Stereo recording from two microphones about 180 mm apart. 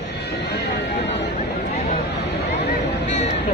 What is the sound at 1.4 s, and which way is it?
Speech, 35° left (ahead or behind).